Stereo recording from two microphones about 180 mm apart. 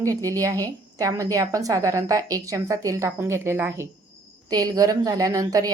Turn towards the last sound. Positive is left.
turn(degrees=-20)  # may be behind; listen again after turning